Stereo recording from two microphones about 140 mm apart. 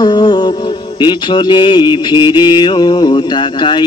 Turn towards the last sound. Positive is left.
turn(degrees=35)  # may be behind; listen again after turning